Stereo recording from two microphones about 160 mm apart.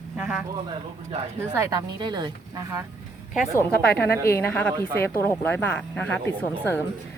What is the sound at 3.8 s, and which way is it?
Speech, 85° left.